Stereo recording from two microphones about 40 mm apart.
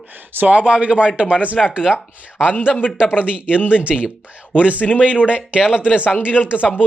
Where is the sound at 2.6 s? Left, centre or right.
Left.